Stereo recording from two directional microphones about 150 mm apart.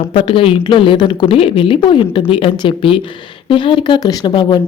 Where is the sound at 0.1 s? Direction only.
35° left (ahead or behind).